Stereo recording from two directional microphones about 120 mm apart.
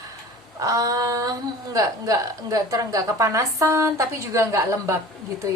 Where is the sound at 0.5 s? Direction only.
30° right (ahead or behind).